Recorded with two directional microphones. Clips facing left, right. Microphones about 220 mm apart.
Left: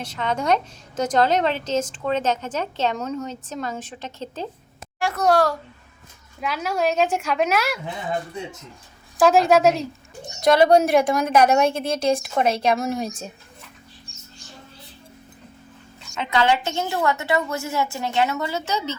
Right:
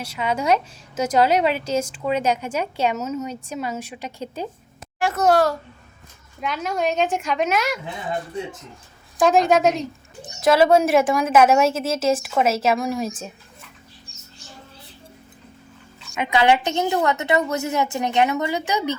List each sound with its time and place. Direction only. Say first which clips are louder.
0.0 s a woman's voice: right 1 dB; 10° right (ahead or behind)
4.9 s a child's voice: right 1 dB; centre (ahead or behind)
9.1 s a woman's voice: left 1 dB; centre (ahead or behind)
16.1 s a woman's voice: right 2 dB; 15° right (ahead or behind)